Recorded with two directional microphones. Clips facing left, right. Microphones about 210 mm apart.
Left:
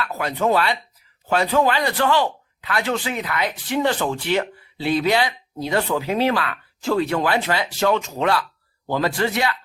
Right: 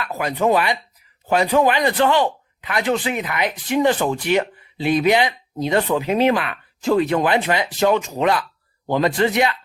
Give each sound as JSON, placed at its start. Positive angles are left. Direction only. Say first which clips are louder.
{"t": 0.0, "sound": "speech", "louder": "right 2 dB", "side_deg": -15}